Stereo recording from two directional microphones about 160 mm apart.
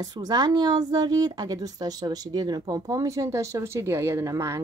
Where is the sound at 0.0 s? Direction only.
25° right (ahead or behind).